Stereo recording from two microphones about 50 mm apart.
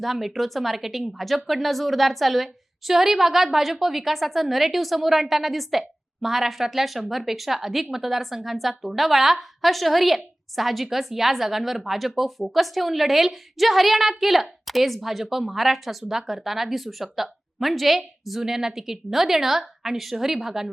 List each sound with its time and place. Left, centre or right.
0.0 s a woman's voice: centre